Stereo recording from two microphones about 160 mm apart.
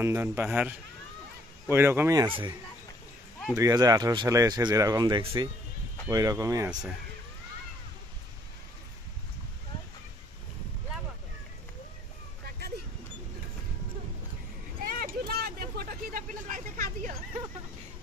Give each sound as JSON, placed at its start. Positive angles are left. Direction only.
{"t": 0.0, "sound": "speech", "side_deg": -15}
{"t": 2.2, "sound": "a man's voice", "side_deg": -30}
{"t": 3.5, "sound": "speech", "side_deg": -20}
{"t": 14.8, "sound": "vehicle", "side_deg": -65}